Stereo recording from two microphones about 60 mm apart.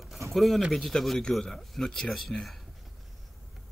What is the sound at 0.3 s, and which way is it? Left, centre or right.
Speech, centre.